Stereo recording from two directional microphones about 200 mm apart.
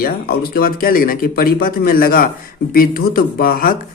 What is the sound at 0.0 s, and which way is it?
Speech, 50° left (ahead or behind).